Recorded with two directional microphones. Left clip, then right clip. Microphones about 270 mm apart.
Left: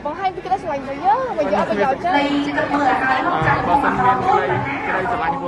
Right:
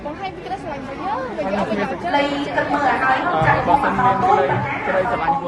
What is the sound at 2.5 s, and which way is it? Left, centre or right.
Speech, right.